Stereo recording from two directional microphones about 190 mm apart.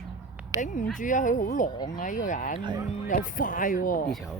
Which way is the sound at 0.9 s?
45° left (ahead or behind).